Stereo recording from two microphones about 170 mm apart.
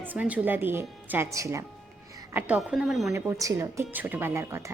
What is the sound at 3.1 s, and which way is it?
A woman's voice, 15° right (ahead or behind).